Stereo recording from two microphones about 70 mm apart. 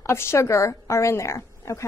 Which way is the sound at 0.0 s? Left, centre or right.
Left.